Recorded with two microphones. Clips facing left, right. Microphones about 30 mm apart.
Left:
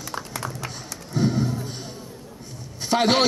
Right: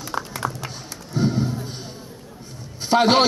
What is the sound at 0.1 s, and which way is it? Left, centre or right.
Music, right.